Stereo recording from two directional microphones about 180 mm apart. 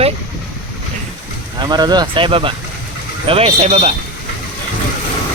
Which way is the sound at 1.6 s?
25° right (ahead or behind).